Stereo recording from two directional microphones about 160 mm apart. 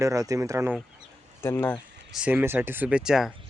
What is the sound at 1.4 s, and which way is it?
Speech, 15° left (ahead or behind).